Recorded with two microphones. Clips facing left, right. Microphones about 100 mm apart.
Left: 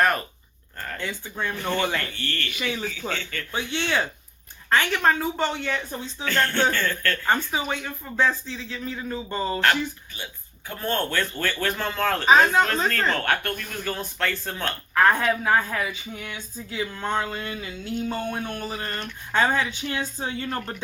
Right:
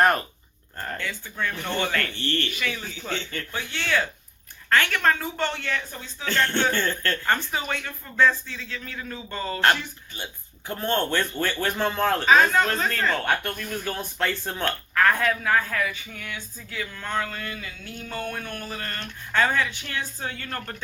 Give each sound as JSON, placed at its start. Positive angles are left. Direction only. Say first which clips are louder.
{"t": 0.9, "sound": "speech", "louder": "left 3 dB", "side_deg": 20}
{"t": 2.1, "sound": "a man's voice", "louder": "right 3 dB", "side_deg": -25}
{"t": 3.5, "sound": "speech", "louder": "left 1 dB", "side_deg": 20}
{"t": 5.9, "sound": "speech", "louder": "left 6 dB", "side_deg": 25}
{"t": 6.7, "sound": "a man's voice", "louder": "even", "side_deg": -25}
{"t": 7.3, "sound": "speech", "louder": "left 2 dB", "side_deg": 15}
{"t": 10.7, "sound": "a man's voice", "louder": "right 2 dB", "side_deg": -25}
{"t": 12.2, "sound": "speech", "louder": "left 2 dB", "side_deg": 15}
{"t": 13.0, "sound": "speech", "louder": "even", "side_deg": -5}
{"t": 14.6, "sound": "speech", "louder": "left 2 dB", "side_deg": 20}